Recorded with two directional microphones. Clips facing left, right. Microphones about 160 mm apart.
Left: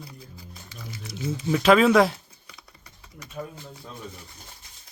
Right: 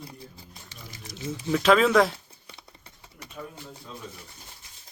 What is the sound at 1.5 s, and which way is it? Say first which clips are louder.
Speech: left 2 dB; centre (ahead or behind).